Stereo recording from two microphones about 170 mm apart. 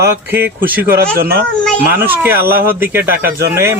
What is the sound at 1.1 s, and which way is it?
Speech, 65° right (ahead or behind).